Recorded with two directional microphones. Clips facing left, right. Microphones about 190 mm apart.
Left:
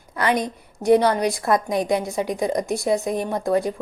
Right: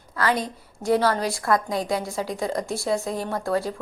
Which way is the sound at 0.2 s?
20° left (ahead or behind).